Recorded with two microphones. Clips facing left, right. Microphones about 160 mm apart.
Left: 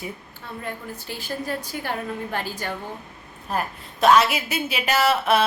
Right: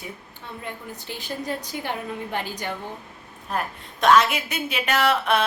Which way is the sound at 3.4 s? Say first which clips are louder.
Left 1 dB; 5° left (ahead or behind).